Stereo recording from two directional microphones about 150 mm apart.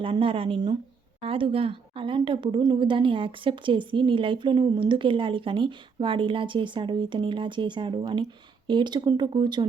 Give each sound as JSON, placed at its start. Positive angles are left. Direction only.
{"t": 0.0, "sound": "a woman's voice", "side_deg": -35}